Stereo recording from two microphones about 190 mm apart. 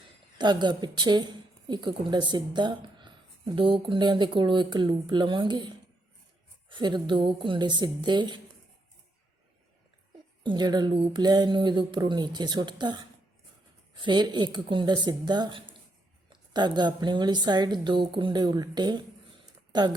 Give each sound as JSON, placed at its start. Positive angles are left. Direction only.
{"t": 0.3, "sound": "a woman's voice", "side_deg": -25}
{"t": 10.4, "sound": "a woman's voice", "side_deg": -25}